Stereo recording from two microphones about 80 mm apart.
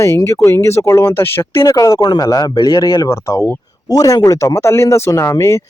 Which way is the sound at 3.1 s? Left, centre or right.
Left.